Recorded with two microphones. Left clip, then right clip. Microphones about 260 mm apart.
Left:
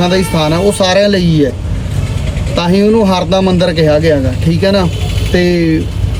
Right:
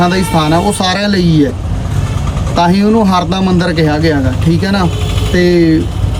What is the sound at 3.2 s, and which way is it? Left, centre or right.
Speech, centre.